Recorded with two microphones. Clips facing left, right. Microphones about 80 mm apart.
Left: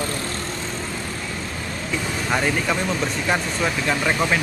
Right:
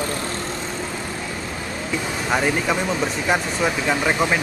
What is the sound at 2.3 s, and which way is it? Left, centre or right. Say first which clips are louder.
Speech: right 2 dB; centre.